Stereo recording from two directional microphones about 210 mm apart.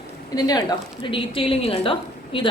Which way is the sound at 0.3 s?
20° left (ahead or behind).